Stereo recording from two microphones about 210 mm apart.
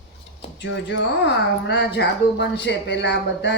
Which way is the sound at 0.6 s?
60° left (ahead or behind).